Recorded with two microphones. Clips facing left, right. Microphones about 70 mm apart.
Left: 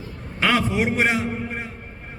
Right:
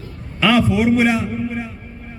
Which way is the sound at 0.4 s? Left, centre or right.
Left.